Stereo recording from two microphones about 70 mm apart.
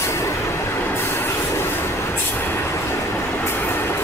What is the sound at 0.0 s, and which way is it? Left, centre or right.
Train, left.